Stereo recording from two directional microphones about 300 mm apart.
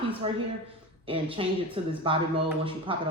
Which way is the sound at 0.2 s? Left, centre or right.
Centre.